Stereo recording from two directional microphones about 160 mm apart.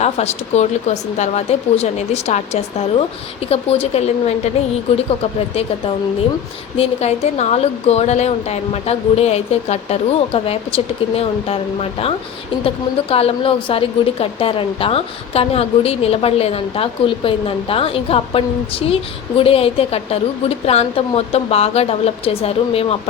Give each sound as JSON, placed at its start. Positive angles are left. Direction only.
{"t": 0.0, "sound": "a woman's voice", "side_deg": 45}
{"t": 6.7, "sound": "a woman's voice", "side_deg": 40}